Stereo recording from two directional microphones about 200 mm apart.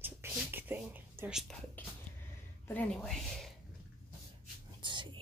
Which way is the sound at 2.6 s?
5° left (ahead or behind).